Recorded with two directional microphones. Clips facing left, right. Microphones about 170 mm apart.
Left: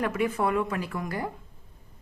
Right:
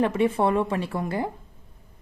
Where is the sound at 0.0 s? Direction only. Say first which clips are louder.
Right 5 dB; 30° right (ahead or behind).